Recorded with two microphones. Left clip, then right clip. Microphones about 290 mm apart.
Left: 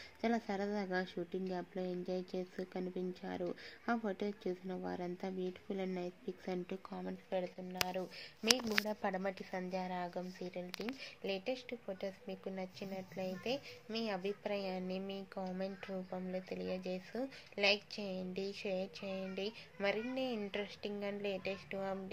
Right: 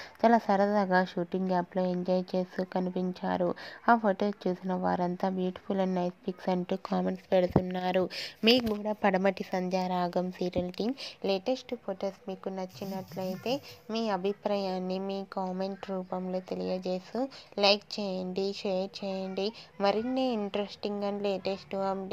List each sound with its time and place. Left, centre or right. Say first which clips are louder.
0.2 s speech: right 14 dB; right